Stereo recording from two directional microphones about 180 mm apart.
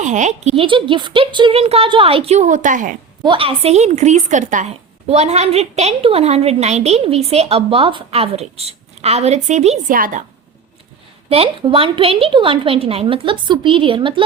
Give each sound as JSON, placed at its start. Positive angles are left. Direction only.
{"t": 0.0, "sound": "a woman's voice", "side_deg": -40}
{"t": 3.2, "sound": "a woman's voice", "side_deg": -30}
{"t": 11.3, "sound": "a woman's voice", "side_deg": -30}